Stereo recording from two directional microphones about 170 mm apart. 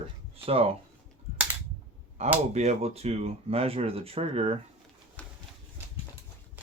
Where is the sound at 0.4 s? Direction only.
35° right (ahead or behind).